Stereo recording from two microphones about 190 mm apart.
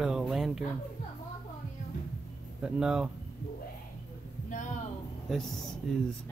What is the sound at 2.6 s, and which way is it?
Speech, 5° right (ahead or behind).